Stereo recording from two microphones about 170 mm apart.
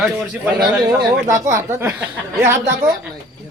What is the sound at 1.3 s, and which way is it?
Speech, 15° right (ahead or behind).